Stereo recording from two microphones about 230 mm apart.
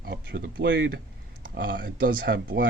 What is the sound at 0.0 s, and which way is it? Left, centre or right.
Speech, right.